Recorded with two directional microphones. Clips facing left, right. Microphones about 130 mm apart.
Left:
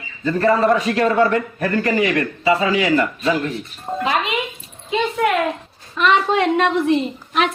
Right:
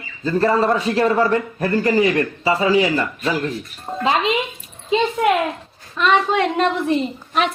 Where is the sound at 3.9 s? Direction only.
Centre (ahead or behind).